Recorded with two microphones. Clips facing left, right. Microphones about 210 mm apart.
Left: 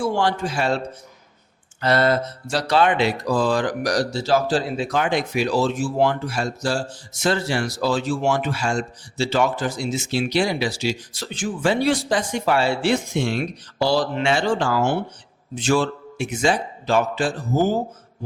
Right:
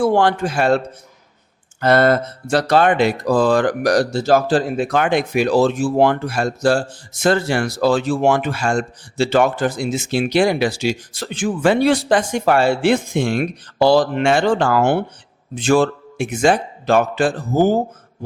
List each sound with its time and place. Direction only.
0.0 s speech: 55° right (ahead or behind)
1.8 s speech: 50° right (ahead or behind)